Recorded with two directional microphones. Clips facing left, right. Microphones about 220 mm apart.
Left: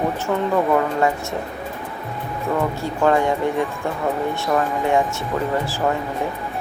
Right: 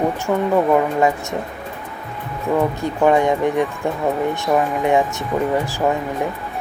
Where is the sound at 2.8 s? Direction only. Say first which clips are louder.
Right 2 dB; 15° right (ahead or behind).